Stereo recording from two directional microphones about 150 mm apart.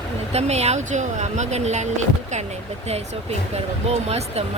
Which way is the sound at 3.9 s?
45° right (ahead or behind).